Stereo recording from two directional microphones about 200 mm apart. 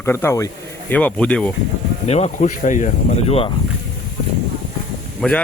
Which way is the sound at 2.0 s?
35° left (ahead or behind).